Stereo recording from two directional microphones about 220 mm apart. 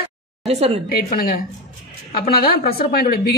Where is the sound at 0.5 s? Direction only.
30° right (ahead or behind).